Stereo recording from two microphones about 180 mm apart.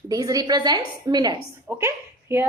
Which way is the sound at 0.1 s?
20° right (ahead or behind).